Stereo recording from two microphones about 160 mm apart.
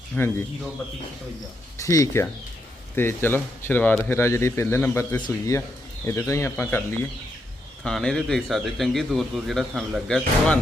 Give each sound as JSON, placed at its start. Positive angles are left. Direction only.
{"t": 0.1, "sound": "a man's voice", "side_deg": 10}
{"t": 1.8, "sound": "a man's voice", "side_deg": 20}